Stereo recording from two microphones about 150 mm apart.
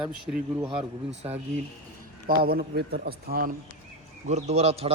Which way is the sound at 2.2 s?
85° right.